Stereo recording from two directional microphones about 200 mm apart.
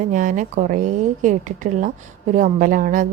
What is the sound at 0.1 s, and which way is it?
A woman's voice, 40° right (ahead or behind).